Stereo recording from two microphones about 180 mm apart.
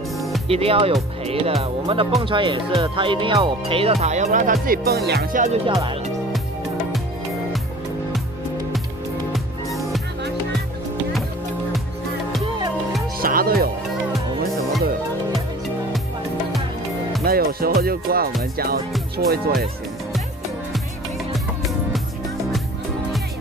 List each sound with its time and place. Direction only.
0.5 s speech: 30° right (ahead or behind)
9.3 s music: centre (ahead or behind)
13.2 s music: 55° right (ahead or behind)
17.2 s music: 55° right (ahead or behind)
21.3 s music: centre (ahead or behind)